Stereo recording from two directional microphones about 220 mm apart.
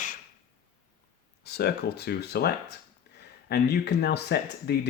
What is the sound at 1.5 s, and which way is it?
Speech, 45° left (ahead or behind).